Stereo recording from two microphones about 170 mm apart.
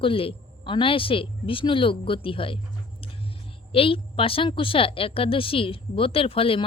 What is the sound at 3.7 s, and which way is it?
Speech, 35° left (ahead or behind).